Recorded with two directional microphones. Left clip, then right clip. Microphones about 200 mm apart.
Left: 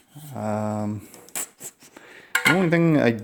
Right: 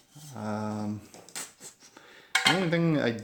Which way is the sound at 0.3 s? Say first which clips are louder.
Left 8 dB; 40° left (ahead or behind).